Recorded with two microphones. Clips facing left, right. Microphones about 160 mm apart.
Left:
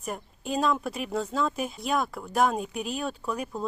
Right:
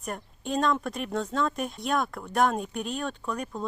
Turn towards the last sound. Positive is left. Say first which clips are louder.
# left 1 dB
turn(degrees=5)  # may be behind; listen again after turning